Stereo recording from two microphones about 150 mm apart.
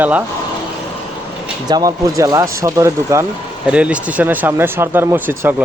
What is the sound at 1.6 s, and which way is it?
Speech, 25° right (ahead or behind).